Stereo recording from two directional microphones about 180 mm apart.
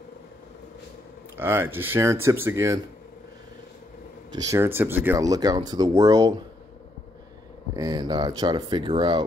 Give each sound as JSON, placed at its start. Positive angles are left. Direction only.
{"t": 1.3, "sound": "speech", "side_deg": -10}
{"t": 4.3, "sound": "speech", "side_deg": -15}
{"t": 7.7, "sound": "speech", "side_deg": -20}